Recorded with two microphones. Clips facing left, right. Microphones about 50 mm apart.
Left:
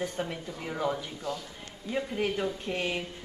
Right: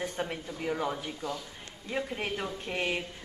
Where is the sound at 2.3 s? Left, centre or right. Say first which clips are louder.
Left 2 dB; centre.